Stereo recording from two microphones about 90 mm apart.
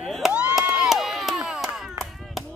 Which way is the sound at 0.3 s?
10° right (ahead or behind).